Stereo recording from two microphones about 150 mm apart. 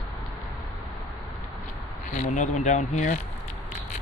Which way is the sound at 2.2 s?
55° left (ahead or behind).